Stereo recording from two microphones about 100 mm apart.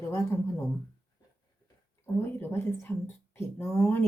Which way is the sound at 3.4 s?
25° left (ahead or behind).